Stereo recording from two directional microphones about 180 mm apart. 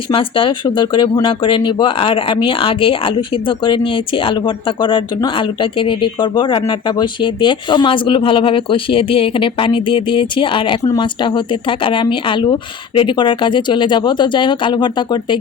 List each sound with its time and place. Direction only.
0.1 s speech: 30° left (ahead or behind)